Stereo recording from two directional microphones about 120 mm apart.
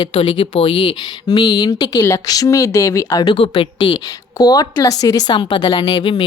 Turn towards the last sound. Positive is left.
turn(degrees=40)  # may be behind; listen again after turning